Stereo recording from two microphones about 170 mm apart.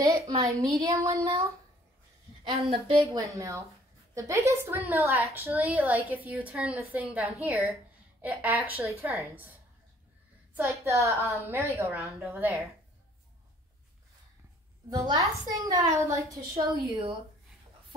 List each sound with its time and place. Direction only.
0.0 s a woman's voice: 20° right (ahead or behind)
2.4 s a woman's voice: 30° right (ahead or behind)
3.1 s a woman's voice: 20° right (ahead or behind)
14.9 s a woman's voice: 20° right (ahead or behind)